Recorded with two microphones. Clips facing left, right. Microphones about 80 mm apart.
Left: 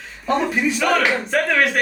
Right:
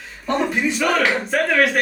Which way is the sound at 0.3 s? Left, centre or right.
Centre.